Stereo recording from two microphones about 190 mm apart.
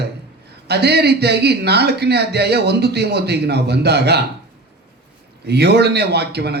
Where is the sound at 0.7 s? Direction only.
60° right (ahead or behind).